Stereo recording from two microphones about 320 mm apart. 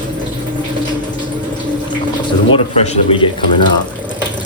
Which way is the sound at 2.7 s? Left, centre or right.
Centre.